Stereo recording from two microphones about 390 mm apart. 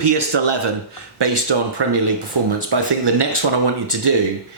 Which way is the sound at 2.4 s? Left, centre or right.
Right.